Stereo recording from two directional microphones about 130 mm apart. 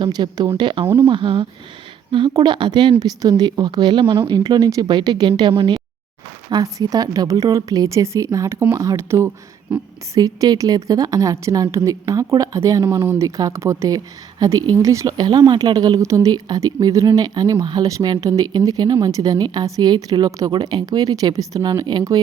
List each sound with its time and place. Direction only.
0.0 s speech: 35° right (ahead or behind)
6.5 s a woman's voice: 30° right (ahead or behind); by 9.8 s 10° right (ahead or behind)
10.2 s a woman's voice: 30° right (ahead or behind)